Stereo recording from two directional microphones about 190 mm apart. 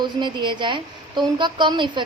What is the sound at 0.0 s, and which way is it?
A woman's voice, 25° right (ahead or behind).